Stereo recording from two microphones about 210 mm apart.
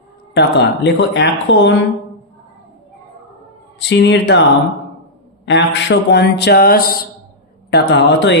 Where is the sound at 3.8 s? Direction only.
55° left (ahead or behind).